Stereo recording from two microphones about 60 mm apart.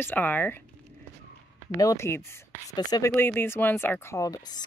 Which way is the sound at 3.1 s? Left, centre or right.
Left.